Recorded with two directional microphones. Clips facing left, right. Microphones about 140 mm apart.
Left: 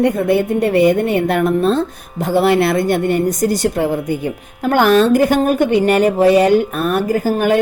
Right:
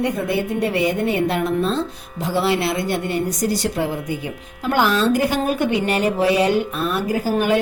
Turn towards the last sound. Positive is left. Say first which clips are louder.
# left 4 dB
turn(degrees=50)  # may be behind; listen again after turning